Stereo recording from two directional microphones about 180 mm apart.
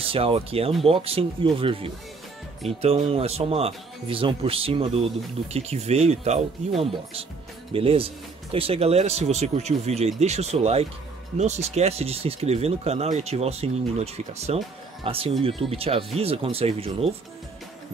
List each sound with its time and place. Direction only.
0.0 s speech: 30° right (ahead or behind)
7.7 s speech: 30° right (ahead or behind)